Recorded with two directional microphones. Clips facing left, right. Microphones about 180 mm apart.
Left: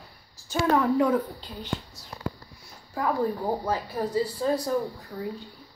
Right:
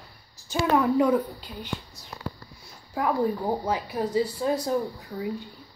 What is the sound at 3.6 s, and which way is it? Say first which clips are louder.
Speech: right 1 dB; 15° right (ahead or behind).